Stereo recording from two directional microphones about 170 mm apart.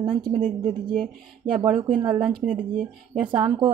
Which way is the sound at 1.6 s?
30° right (ahead or behind).